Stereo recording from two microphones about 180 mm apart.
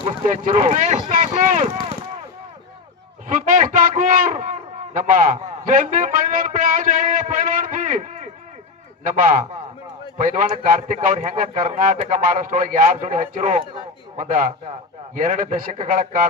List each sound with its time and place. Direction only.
0.3 s a man's voice: 40° right (ahead or behind)
3.2 s a man's voice: 50° right (ahead or behind)